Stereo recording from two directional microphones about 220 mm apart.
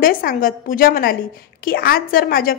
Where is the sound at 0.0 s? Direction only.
40° left (ahead or behind).